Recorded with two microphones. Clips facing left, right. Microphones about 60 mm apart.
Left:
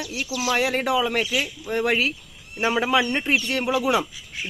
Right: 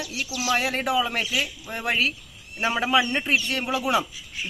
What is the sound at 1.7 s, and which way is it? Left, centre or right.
Speech, centre.